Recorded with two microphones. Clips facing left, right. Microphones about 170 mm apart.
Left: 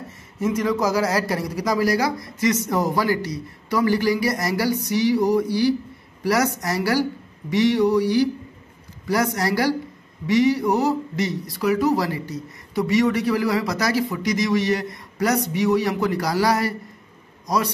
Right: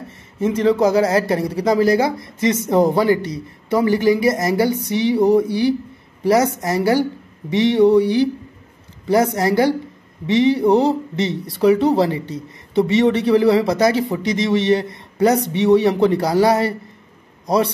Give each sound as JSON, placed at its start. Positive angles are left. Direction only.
{"t": 0.4, "sound": "speech", "side_deg": -30}